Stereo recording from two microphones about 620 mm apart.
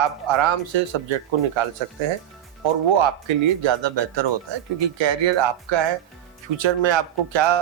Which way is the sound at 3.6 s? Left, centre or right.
Right.